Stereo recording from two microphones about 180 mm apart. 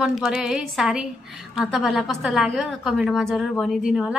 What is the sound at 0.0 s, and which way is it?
A woman's voice, centre (ahead or behind).